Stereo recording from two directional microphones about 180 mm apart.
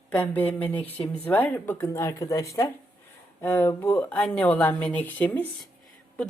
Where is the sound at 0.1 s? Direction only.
10° left (ahead or behind).